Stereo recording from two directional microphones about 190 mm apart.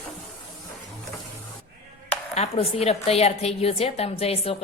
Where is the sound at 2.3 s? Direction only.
35° left (ahead or behind).